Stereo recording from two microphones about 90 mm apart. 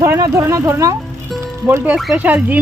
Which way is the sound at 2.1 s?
20° right (ahead or behind).